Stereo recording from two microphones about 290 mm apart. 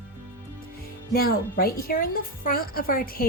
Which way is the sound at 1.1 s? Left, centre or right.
Left.